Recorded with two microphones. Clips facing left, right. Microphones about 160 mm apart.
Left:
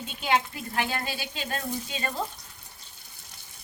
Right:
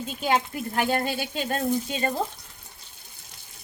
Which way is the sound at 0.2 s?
40° right (ahead or behind).